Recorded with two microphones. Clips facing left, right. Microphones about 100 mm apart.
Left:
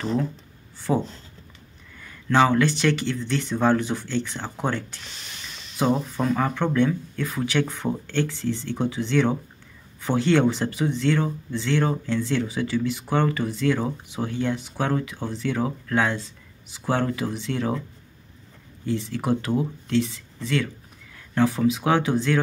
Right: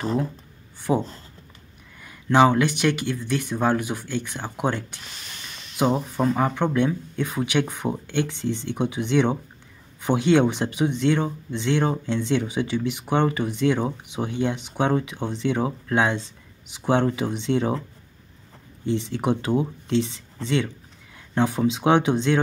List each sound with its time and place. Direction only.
0.9 s speech: 10° right (ahead or behind)
18.9 s speech: 20° right (ahead or behind)